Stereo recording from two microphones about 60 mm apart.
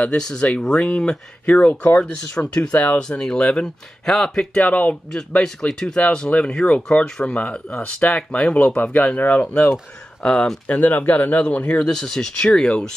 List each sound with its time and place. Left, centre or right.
0.0 s speech: centre
1.7 s speech: left
2.0 s speech: left
3.0 s speech: centre
4.6 s speech: left
5.4 s speech: centre; by 9.5 s left
10.2 s speech: centre
10.7 s speech: left
11.8 s speech: centre